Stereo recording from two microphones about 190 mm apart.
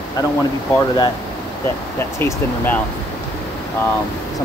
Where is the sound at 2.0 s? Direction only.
15° left (ahead or behind).